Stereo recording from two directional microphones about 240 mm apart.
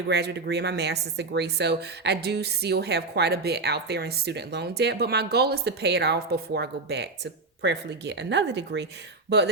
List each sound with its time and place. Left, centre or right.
0.1 s speech: right